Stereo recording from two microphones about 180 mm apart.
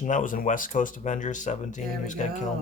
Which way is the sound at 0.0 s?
45° left (ahead or behind).